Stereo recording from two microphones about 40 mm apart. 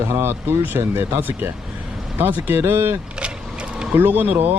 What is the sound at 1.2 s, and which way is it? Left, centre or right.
Speech, right.